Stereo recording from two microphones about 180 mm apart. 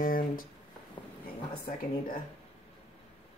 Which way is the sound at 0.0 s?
50° left (ahead or behind).